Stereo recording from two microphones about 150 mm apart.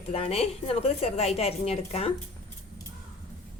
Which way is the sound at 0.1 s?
45° left (ahead or behind).